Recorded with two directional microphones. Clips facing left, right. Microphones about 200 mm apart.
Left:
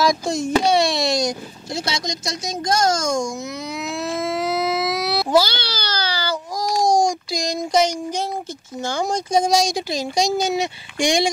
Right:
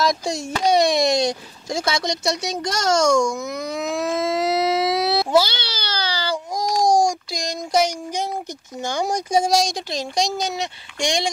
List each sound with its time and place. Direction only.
0.0 s speech: centre (ahead or behind)
0.8 s speech: 20° right (ahead or behind)
1.7 s speech: 50° right (ahead or behind)
2.0 s a child's voice: 70° right (ahead or behind); by 4.2 s 50° right (ahead or behind)
4.4 s baby cry: 35° right (ahead or behind)
6.7 s babbling: 15° right (ahead or behind)
7.1 s a sound: centre (ahead or behind)
7.7 s a sound: 10° right (ahead or behind)
8.8 s speech: 15° right (ahead or behind); by 11.2 s 10° left (ahead or behind)